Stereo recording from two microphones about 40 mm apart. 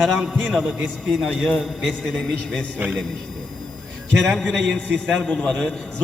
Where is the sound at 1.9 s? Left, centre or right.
Centre.